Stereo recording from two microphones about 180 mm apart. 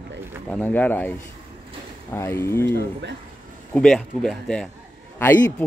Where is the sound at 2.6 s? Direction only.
70° right (ahead or behind).